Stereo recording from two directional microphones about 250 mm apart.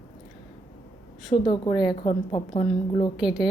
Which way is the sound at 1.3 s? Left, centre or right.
Left.